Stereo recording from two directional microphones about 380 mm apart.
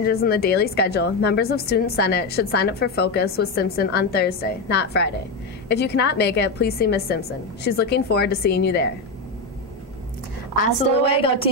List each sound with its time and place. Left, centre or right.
0.0 s a woman's voice: left
10.5 s a woman's voice: centre